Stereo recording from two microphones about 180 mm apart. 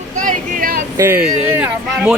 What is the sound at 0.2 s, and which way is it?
Vehicle, 50° right (ahead or behind).